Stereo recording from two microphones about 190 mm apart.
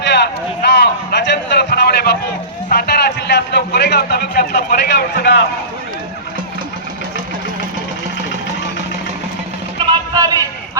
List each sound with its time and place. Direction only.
0.0 s a sound: 60° left (ahead or behind)
2.6 s a man's voice: 60° left (ahead or behind)
9.7 s music: 20° right (ahead or behind)